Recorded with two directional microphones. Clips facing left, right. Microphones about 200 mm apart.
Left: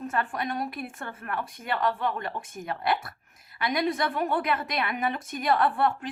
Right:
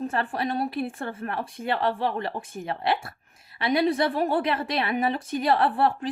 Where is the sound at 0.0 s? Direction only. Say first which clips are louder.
Right 3 dB; 30° right (ahead or behind).